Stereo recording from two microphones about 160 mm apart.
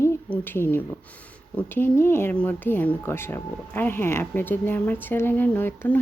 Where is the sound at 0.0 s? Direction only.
15° left (ahead or behind).